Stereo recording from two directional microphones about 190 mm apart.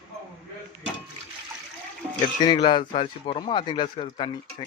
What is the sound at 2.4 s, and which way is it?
Speech, 20° left (ahead or behind).